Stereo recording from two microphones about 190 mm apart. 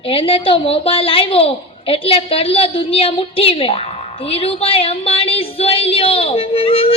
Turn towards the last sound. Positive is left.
turn(degrees=30)  # may be behind; listen again after turning